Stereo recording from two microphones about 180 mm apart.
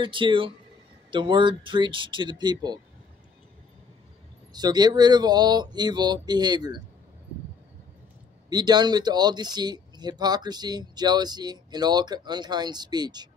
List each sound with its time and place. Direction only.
0.0 s speech: 30° right (ahead or behind)
4.5 s speech: 25° right (ahead or behind)
8.5 s speech: 25° right (ahead or behind)